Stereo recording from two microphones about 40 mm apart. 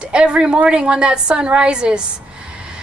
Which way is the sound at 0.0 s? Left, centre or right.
Right.